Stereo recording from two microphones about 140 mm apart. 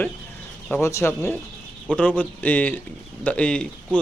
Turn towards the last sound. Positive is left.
turn(degrees=10)  # may be behind; listen again after turning